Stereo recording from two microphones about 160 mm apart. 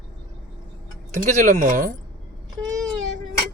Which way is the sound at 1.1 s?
50° right (ahead or behind).